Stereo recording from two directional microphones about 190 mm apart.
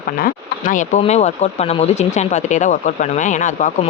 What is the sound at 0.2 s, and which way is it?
Speech, 45° left (ahead or behind).